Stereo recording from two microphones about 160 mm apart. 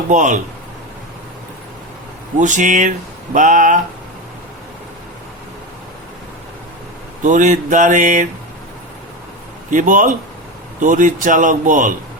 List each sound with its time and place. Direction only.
0.1 s mantra: 50° right (ahead or behind)
2.4 s mantra: 50° right (ahead or behind)
7.2 s mantra: 50° right (ahead or behind)
9.6 s a man's voice: 55° right (ahead or behind)